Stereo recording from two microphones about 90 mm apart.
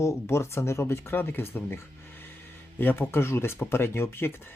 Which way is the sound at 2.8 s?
25° left (ahead or behind).